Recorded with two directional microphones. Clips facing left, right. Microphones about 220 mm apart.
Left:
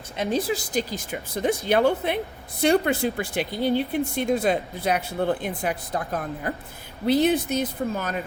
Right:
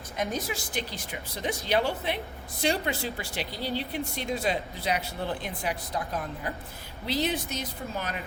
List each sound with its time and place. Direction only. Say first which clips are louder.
0.2 s speech: left 7 dB; 30° left (ahead or behind); by 8.2 s 45° left (ahead or behind)